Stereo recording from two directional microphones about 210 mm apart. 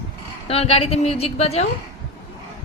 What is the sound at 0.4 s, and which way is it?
A woman's voice, 30° left (ahead or behind).